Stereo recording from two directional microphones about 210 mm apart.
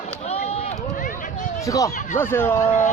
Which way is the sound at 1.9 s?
35° left (ahead or behind).